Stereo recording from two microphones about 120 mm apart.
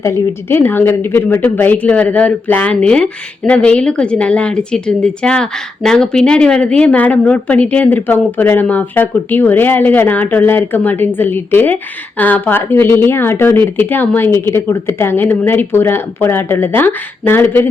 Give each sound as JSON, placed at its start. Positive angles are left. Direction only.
{"t": 0.0, "sound": "speech", "side_deg": 20}